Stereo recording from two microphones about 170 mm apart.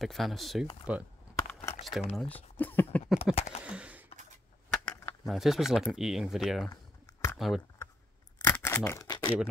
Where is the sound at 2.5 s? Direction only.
10° left (ahead or behind).